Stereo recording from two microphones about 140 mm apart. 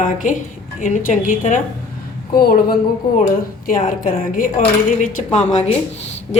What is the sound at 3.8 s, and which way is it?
Speech, 80° left.